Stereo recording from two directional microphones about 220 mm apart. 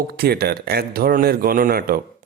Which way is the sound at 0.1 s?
45° right (ahead or behind).